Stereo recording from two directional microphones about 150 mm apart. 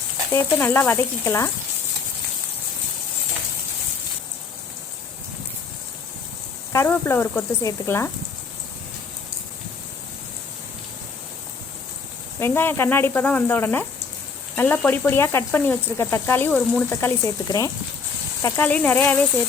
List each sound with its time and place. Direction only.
0.3 s speech: 15° left (ahead or behind)
6.7 s speech: 15° left (ahead or behind)
12.4 s speech: 15° left (ahead or behind)